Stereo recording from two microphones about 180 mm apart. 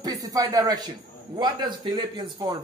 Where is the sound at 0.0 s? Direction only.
20° right (ahead or behind).